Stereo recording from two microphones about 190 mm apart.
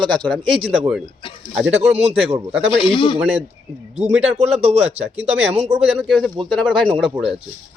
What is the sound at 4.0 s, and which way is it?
Speech, 35° right (ahead or behind).